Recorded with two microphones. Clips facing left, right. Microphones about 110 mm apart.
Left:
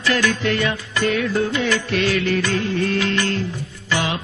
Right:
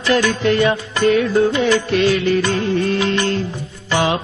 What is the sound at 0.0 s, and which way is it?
Music, 25° right (ahead or behind).